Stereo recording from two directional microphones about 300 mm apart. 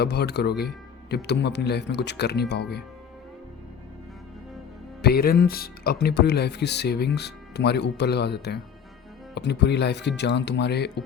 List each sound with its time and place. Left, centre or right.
0.0 s speech: left
5.0 s speech: left